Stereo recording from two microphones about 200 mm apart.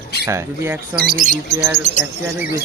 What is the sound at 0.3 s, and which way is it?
Speech, 10° right (ahead or behind).